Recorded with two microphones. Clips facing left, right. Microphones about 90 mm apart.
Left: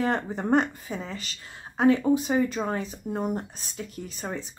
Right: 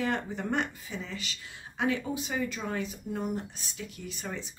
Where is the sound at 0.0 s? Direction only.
35° left (ahead or behind).